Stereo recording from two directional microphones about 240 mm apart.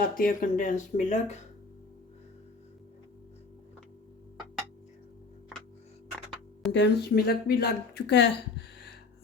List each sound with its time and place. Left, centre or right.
0.0 s speech: left
6.7 s speech: left